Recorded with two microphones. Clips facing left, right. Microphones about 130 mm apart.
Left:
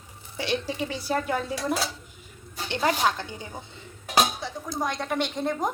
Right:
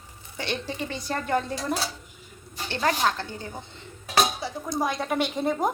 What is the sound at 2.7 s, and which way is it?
Speech, 15° left (ahead or behind).